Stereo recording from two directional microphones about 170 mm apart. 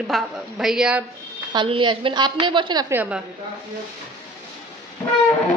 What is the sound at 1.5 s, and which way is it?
A woman's voice, 30° right (ahead or behind).